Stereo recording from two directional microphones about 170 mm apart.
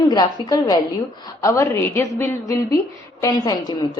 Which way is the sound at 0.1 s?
25° left (ahead or behind).